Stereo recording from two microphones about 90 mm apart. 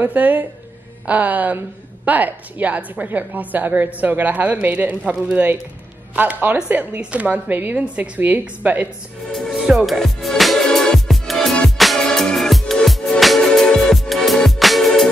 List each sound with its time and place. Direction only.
0.0 s a woman's voice: 20° right (ahead or behind)
9.3 s speech: centre (ahead or behind)
9.7 s music: 5° right (ahead or behind)